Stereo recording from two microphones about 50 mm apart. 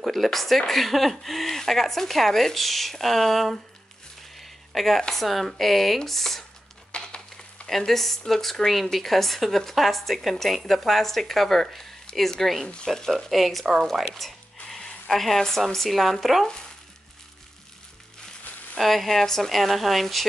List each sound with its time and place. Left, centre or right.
0.0 s speech: centre
4.4 s a sound: centre
5.1 s speech: centre
6.9 s a sound: centre
7.6 s speech: centre
18.8 s speech: centre